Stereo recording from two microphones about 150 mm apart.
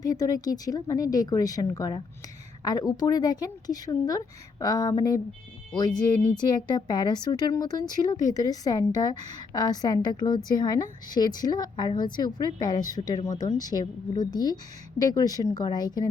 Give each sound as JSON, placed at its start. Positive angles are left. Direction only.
{"t": 0.0, "sound": "a woman's voice", "side_deg": 25}